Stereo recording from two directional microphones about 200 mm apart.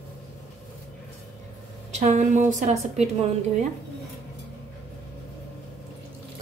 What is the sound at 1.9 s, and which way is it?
A woman's voice, 35° right (ahead or behind).